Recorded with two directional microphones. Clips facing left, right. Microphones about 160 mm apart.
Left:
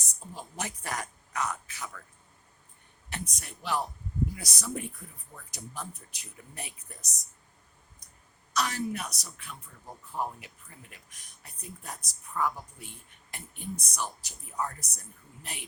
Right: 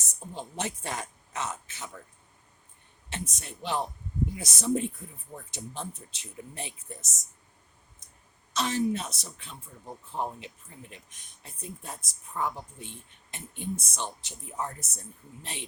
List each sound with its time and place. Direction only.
0.3 s speech: 25° right (ahead or behind)
3.1 s speech: 25° right (ahead or behind)
8.5 s speech: 25° right (ahead or behind)